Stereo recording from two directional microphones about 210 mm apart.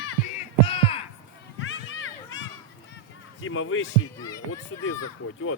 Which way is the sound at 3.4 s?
70° left (ahead or behind).